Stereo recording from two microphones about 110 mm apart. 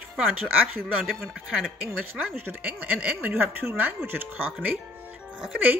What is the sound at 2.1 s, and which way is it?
A woman's voice, 20° right (ahead or behind).